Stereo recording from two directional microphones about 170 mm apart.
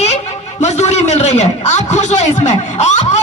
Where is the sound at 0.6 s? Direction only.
40° left (ahead or behind).